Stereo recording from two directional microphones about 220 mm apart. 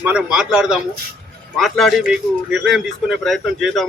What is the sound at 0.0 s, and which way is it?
A man's voice, 5° right (ahead or behind).